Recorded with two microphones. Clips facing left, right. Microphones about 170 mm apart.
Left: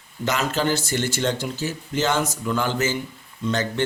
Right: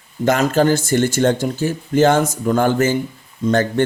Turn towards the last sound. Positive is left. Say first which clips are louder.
# right 8 dB
turn(degrees=-50)  # may be behind; listen again after turning